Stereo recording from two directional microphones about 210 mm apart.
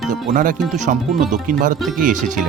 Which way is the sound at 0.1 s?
40° right (ahead or behind).